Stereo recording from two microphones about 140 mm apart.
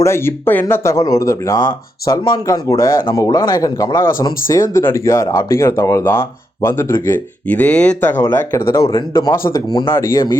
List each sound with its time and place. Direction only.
0.0 s speech: 20° left (ahead or behind)